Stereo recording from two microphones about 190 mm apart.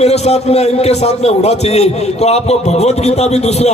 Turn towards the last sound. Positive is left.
turn(degrees=35)  # may be behind; listen again after turning